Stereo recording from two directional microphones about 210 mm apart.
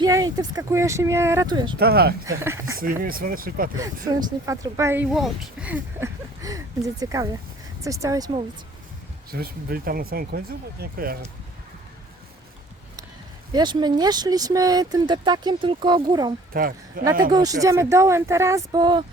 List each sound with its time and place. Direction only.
0.0 s speech: 15° right (ahead or behind)
1.8 s speech: 50° right (ahead or behind)
2.4 s speech: 10° right (ahead or behind)
2.7 s speech: 45° right (ahead or behind)
3.8 s speech: 15° right (ahead or behind)
9.3 s speech: 45° right (ahead or behind)
13.5 s speech: 20° right (ahead or behind)
16.5 s speech: 45° right (ahead or behind)
17.3 s speech: 15° right (ahead or behind)